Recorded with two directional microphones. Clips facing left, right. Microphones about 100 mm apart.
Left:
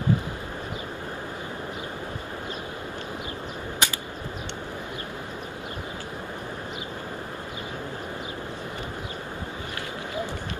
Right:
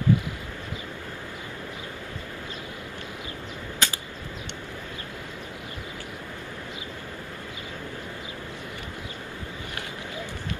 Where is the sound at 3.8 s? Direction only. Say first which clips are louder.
Left 1 dB; 20° left (ahead or behind).